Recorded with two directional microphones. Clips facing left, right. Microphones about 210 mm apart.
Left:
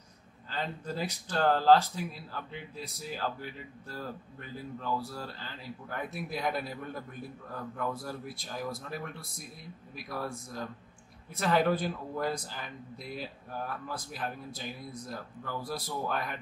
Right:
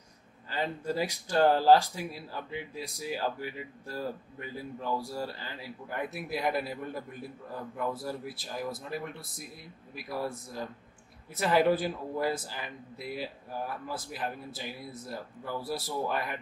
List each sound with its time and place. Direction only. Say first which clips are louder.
0.5 s speech: right 4 dB; 10° right (ahead or behind)